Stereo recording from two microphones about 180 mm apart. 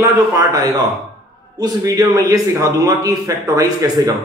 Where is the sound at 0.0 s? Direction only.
20° right (ahead or behind).